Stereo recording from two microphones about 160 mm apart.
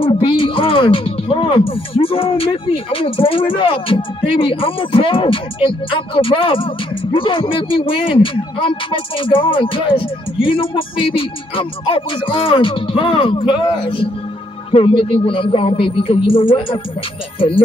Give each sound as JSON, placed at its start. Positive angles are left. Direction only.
{"t": 0.0, "sound": "speech", "side_deg": 35}